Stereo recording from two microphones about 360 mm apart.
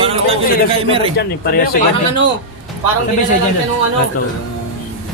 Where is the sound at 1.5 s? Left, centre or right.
Left.